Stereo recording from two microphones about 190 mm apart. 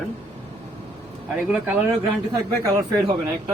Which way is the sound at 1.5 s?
10° right (ahead or behind).